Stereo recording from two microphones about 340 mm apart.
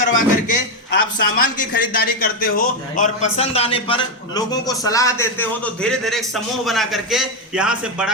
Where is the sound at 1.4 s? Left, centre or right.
Left.